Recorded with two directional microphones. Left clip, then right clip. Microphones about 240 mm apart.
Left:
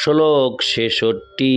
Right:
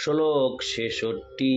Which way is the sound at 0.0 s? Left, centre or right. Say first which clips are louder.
Left 8 dB; left.